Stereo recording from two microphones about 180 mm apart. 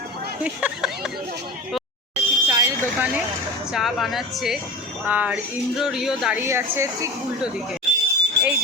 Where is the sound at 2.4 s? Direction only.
25° right (ahead or behind).